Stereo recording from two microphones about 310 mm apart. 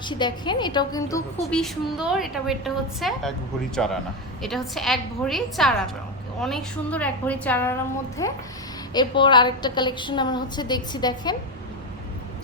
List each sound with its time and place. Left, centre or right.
0.0 s a woman's voice: centre